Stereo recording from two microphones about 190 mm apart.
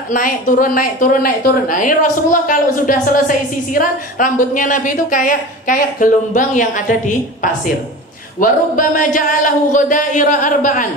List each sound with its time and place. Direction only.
0.1 s a woman's voice: 45° left (ahead or behind)
8.4 s a woman's voice: 45° left (ahead or behind)